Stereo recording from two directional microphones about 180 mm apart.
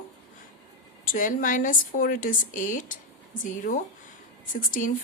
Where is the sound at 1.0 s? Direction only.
50° left (ahead or behind).